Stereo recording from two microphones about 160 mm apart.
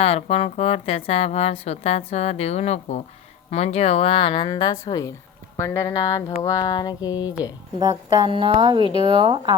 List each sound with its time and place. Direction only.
0.0 s speech: 40° left (ahead or behind); by 5.1 s 20° left (ahead or behind)
5.5 s a sound: 15° left (ahead or behind)
7.8 s speech: 25° right (ahead or behind)